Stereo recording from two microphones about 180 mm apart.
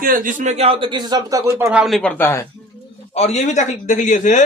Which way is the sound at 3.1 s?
40° left (ahead or behind).